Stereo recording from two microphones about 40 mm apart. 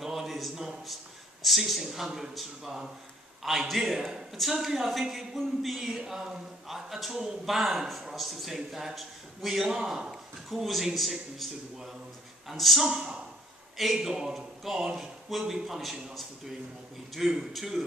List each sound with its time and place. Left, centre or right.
0.0 s a sound: centre
1.4 s a man's voice: centre
12.8 s speech: centre
14.3 s speech: centre
17.5 s a man's voice: centre